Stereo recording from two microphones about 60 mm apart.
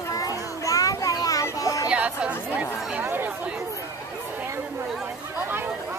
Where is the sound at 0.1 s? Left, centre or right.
Left.